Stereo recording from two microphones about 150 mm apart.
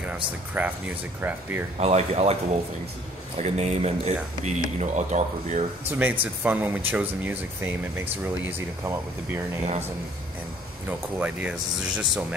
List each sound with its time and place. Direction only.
0.6 s speech: 10° right (ahead or behind)
1.8 s speech: 45° right (ahead or behind)
5.9 s speech: 10° right (ahead or behind)
10.9 s speech: 10° right (ahead or behind)